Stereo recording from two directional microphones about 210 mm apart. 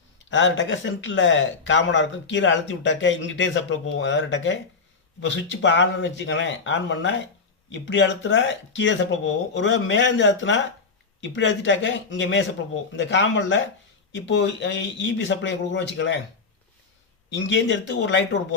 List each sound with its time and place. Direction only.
0.3 s speech: 60° left (ahead or behind)
17.2 s speech: 60° left (ahead or behind)